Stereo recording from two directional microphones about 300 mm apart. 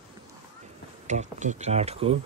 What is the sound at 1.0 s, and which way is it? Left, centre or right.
Speech, right.